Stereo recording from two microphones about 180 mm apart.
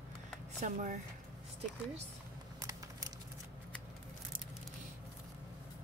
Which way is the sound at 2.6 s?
20° right (ahead or behind).